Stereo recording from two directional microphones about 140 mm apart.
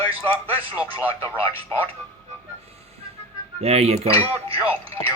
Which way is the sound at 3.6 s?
45° right (ahead or behind).